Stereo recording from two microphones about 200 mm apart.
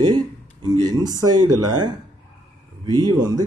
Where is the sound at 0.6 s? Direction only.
20° right (ahead or behind).